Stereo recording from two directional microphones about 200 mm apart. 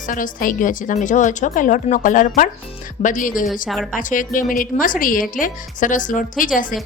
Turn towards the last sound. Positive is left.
turn(degrees=40)  # may be behind; listen again after turning